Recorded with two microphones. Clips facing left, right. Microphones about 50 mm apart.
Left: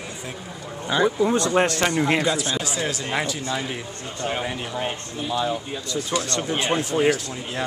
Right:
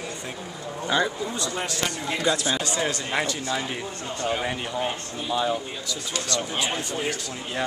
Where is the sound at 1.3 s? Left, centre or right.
Left.